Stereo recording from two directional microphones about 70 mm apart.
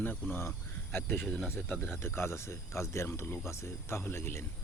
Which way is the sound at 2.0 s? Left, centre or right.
Left.